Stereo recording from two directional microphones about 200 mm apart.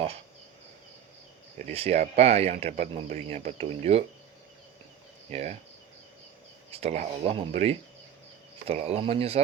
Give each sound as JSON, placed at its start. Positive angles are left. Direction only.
{"t": 1.5, "sound": "speech", "side_deg": -35}
{"t": 5.3, "sound": "speech", "side_deg": -30}
{"t": 6.7, "sound": "speech", "side_deg": -30}